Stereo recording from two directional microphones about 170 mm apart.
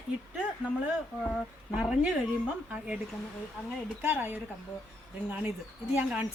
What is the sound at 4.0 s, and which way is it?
A woman's voice, 15° right (ahead or behind).